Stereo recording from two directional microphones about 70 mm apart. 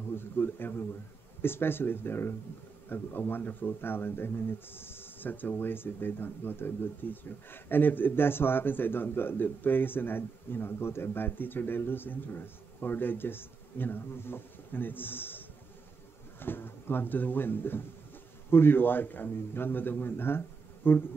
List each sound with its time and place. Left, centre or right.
0.1 s speech: left